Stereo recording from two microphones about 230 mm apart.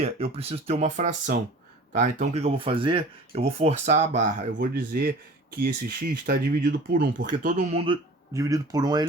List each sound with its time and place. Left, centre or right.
0.0 s speech: right
8.3 s speech: centre